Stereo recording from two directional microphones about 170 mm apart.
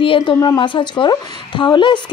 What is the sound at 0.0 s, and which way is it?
A woman's voice, 30° left (ahead or behind).